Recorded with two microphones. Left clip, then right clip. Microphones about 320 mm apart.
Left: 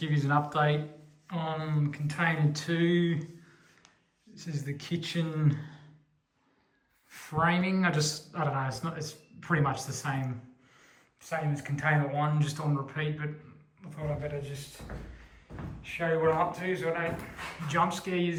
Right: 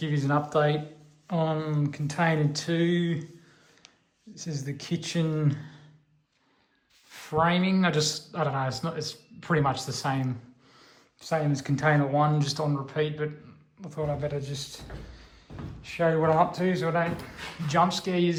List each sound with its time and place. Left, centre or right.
0.0 s speech: centre
4.4 s speech: centre
7.1 s speech: centre
10.8 s a sound: centre
11.8 s speech: centre
15.8 s speech: centre